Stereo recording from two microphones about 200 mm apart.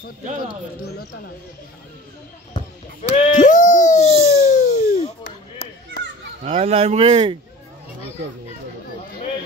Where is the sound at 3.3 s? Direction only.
40° left (ahead or behind).